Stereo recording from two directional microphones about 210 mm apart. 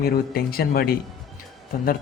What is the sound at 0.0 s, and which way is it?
Speech, 45° left (ahead or behind).